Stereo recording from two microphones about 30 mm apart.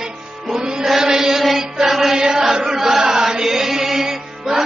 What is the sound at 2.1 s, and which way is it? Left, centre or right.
Chant, centre.